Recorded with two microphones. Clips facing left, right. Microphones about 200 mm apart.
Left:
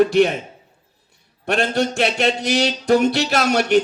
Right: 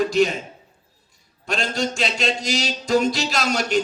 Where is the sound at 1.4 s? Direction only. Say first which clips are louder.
Left 5 dB; 60° left (ahead or behind).